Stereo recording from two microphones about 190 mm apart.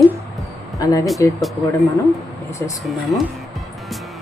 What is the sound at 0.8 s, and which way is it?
Speech, 20° left (ahead or behind).